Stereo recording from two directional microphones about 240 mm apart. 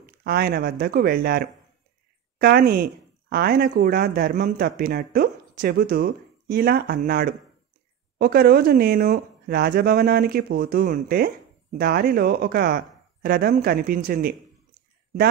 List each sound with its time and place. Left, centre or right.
0.2 s speech: right